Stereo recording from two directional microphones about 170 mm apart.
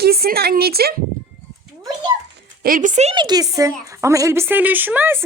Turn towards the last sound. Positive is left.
turn(degrees=-10)  # may be behind; listen again after turning